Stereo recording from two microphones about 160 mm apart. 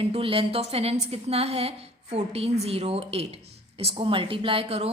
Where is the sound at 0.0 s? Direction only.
35° right (ahead or behind).